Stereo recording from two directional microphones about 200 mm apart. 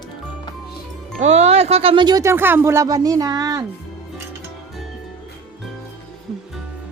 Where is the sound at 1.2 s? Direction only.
35° right (ahead or behind).